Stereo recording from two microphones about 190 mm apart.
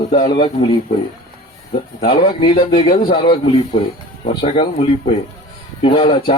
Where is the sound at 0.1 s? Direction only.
25° left (ahead or behind).